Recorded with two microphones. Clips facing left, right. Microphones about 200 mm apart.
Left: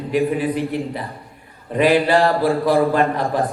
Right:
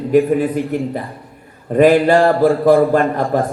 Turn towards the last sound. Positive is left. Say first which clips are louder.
# right 3 dB
turn(degrees=-45)  # may be behind; listen again after turning